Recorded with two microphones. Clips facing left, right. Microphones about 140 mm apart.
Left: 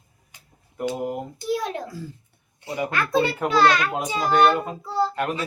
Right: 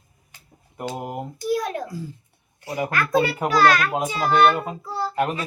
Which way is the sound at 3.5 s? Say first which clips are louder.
Right 1 dB; 25° left (ahead or behind).